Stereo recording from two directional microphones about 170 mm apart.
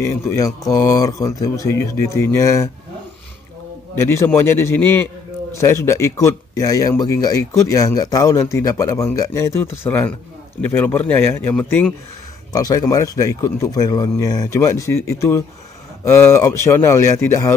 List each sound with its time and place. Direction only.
0.0 s a man's voice: 15° left (ahead or behind)
4.0 s a man's voice: 15° left (ahead or behind)
12.5 s a man's voice: 20° left (ahead or behind)